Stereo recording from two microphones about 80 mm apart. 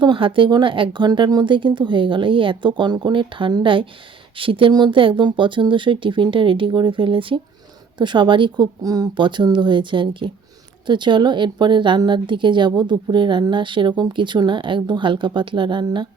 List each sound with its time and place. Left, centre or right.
0.0 s speech: right
7.9 s a woman's voice: right
8.8 s speech: right
9.1 s speech: right
10.8 s a woman's voice: right
13.5 s speech: right